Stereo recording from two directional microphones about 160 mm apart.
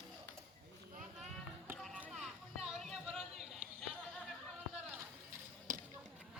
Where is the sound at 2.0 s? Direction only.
Centre (ahead or behind).